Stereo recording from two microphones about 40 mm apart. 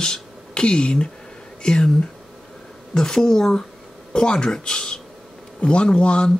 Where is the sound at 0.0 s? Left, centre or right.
Left.